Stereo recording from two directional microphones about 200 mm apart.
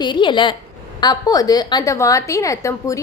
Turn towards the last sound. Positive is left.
turn(degrees=15)  # may be behind; listen again after turning